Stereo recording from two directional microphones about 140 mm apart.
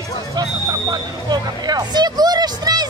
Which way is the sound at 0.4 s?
25° right (ahead or behind).